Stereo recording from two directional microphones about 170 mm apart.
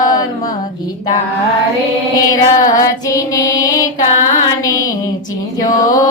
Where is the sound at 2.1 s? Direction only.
20° left (ahead or behind).